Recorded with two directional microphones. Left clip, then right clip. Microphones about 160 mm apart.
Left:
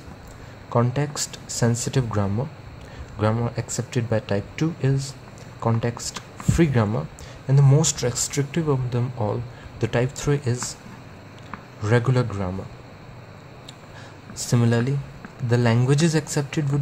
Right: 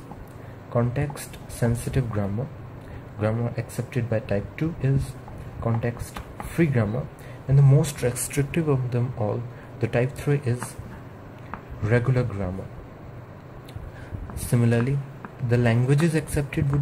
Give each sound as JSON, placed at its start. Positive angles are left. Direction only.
{"t": 0.7, "sound": "speech", "side_deg": 30}
{"t": 11.8, "sound": "speech", "side_deg": 25}
{"t": 14.5, "sound": "speech", "side_deg": 25}